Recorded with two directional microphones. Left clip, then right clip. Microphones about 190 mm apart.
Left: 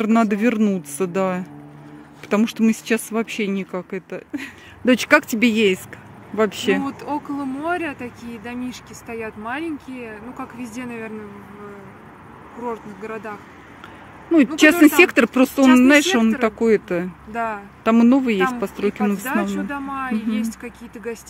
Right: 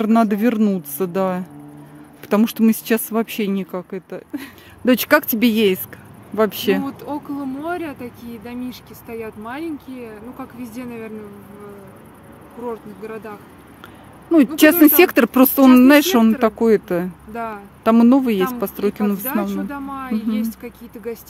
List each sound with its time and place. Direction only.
0.0 s speech: 10° right (ahead or behind)
3.7 s speech: 5° right (ahead or behind)
6.8 s speech: centre (ahead or behind)
12.6 s speech: centre (ahead or behind)
14.3 s speech: 15° right (ahead or behind)